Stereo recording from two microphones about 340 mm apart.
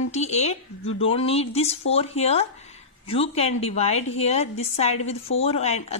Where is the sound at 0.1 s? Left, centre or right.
Centre.